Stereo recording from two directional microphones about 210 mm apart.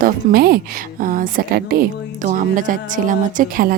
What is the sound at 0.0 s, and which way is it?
A woman's voice, 45° right (ahead or behind).